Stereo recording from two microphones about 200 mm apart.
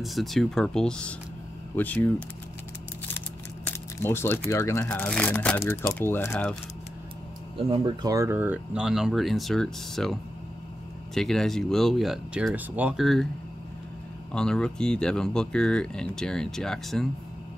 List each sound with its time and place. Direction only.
0.0 s speech: centre (ahead or behind)
3.6 s speech: 10° left (ahead or behind)
7.5 s speech: 30° right (ahead or behind)
8.1 s speech: 15° right (ahead or behind); by 10.1 s centre (ahead or behind)
11.1 s speech: centre (ahead or behind)
14.3 s speech: 5° left (ahead or behind)